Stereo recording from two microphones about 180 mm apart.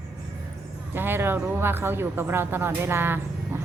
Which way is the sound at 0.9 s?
10° right (ahead or behind).